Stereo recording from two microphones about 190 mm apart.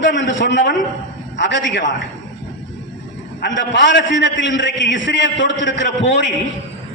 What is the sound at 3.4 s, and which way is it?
A man's voice, 70° left (ahead or behind).